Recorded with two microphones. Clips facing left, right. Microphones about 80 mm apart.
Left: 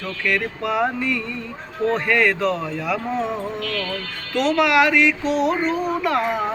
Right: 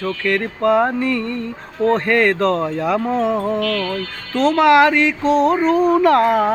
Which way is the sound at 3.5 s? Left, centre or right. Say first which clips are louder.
Right 9 dB; right.